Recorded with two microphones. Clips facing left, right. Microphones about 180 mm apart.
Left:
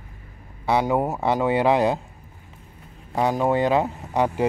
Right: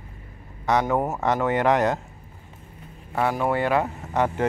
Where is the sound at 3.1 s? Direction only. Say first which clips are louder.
Left 2 dB; 15° left (ahead or behind).